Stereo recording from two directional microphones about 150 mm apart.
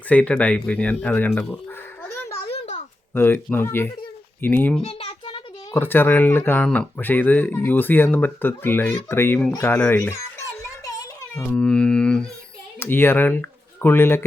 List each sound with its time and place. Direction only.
0.1 s speech: 10° left (ahead or behind)
2.5 s a sound: 45° left (ahead or behind)
3.2 s speech: 15° left (ahead or behind)
4.8 s a sound: 45° left (ahead or behind)
5.7 s a child's voice: 15° left (ahead or behind)
10.8 s music: 25° left (ahead or behind)
11.4 s speech: 5° left (ahead or behind)